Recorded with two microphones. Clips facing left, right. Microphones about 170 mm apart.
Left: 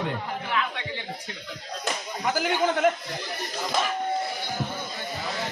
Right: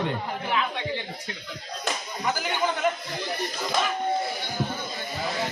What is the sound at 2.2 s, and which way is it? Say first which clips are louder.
Speech: left 2 dB; 55° left (ahead or behind).